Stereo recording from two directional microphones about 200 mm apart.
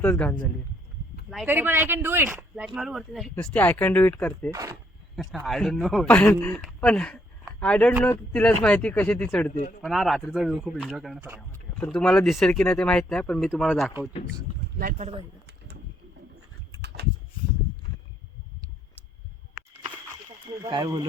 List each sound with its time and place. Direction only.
0.0 s speech: 10° left (ahead or behind)
1.3 s speech: 5° right (ahead or behind)
4.5 s speech: 15° right (ahead or behind)
5.1 s speech: centre (ahead or behind)
14.8 s speech: 40° right (ahead or behind)
20.6 s speech: 20° right (ahead or behind)